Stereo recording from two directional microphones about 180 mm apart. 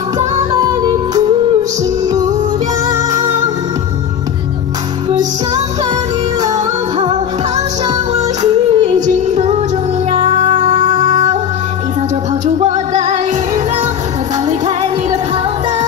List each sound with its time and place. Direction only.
0.5 s music: 20° right (ahead or behind)
8.1 s music: 35° right (ahead or behind)
12.4 s music: 40° right (ahead or behind)